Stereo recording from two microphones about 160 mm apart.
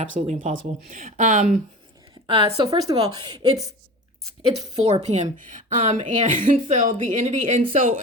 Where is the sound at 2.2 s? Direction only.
35° right (ahead or behind).